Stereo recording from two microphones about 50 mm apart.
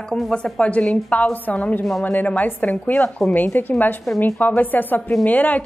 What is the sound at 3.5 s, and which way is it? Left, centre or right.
A woman's voice, left.